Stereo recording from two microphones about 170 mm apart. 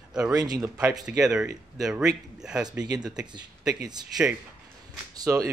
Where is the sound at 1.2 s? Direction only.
5° right (ahead or behind).